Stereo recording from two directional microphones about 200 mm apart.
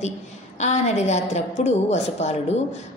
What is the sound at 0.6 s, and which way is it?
A woman's voice, 35° left (ahead or behind).